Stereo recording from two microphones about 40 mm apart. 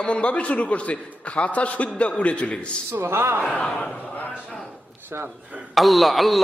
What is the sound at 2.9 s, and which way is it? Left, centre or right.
Speech, right.